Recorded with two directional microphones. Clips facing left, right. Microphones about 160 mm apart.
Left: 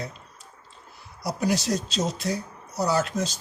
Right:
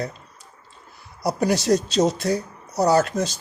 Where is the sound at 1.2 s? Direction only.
65° right (ahead or behind).